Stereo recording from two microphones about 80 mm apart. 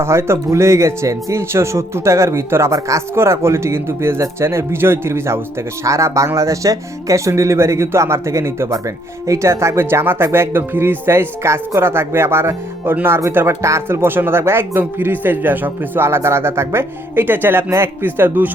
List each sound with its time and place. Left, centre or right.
0.0 s speech: right